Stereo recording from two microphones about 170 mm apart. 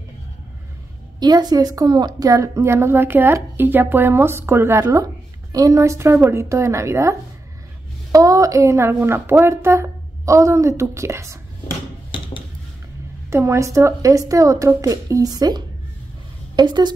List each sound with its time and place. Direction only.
1.2 s a woman's voice: 25° right (ahead or behind)
13.3 s a woman's voice: 15° right (ahead or behind)